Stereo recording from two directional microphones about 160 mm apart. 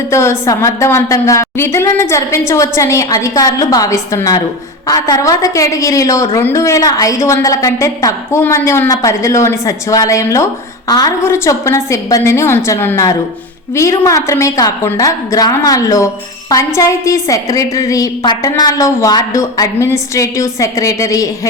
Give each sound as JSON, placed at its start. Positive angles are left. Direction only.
{"t": 0.1, "sound": "a woman's voice", "side_deg": 15}